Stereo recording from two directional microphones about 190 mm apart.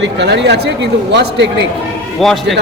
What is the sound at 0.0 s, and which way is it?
Speech, 65° right (ahead or behind).